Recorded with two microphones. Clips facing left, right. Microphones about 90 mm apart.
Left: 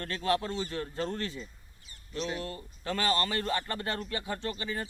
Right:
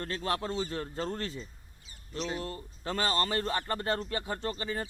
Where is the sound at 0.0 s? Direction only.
30° right (ahead or behind).